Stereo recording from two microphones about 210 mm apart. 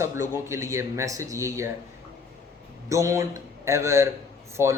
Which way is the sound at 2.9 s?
15° right (ahead or behind).